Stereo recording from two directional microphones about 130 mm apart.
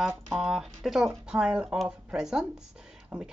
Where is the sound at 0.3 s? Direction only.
5° right (ahead or behind).